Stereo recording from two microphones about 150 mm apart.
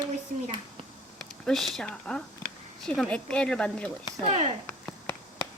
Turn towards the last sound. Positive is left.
turn(degrees=-45)  # may be behind; listen again after turning